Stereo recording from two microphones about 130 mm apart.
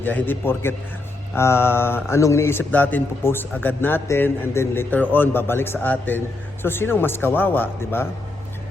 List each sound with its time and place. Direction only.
0.0 s speech: 15° left (ahead or behind)